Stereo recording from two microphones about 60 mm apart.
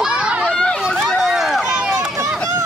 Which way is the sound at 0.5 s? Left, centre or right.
Centre.